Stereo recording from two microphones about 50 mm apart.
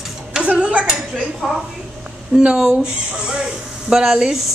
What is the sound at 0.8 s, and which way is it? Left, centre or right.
Dishes, centre.